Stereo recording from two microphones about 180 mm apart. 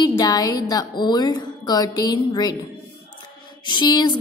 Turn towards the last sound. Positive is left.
turn(degrees=25)  # may be behind; listen again after turning